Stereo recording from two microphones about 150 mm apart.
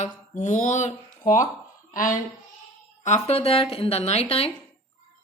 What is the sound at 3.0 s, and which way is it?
A man's voice, 45° left (ahead or behind).